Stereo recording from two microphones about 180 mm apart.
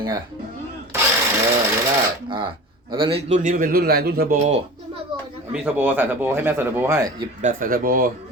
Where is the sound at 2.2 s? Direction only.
30° right (ahead or behind); by 4.4 s 60° right (ahead or behind).